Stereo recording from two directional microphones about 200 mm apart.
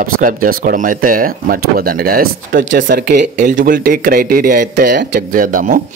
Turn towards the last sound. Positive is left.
turn(degrees=-45)  # may be behind; listen again after turning